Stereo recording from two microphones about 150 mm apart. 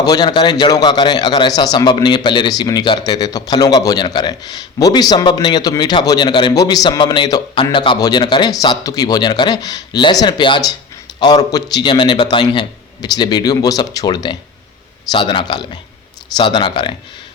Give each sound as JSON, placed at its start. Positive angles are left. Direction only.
{"t": 0.0, "sound": "a man's voice", "side_deg": 25}